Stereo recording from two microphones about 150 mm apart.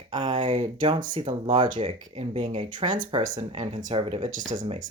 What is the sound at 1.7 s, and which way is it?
Speech, 40° right (ahead or behind).